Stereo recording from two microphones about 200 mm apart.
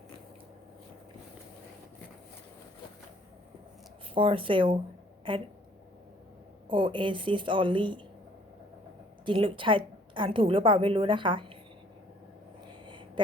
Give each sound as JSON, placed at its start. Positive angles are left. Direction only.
{"t": 4.1, "sound": "a woman's voice", "side_deg": -25}
{"t": 6.7, "sound": "a woman's voice", "side_deg": -25}
{"t": 9.2, "sound": "a woman's voice", "side_deg": -25}
{"t": 12.8, "sound": "a sound", "side_deg": -25}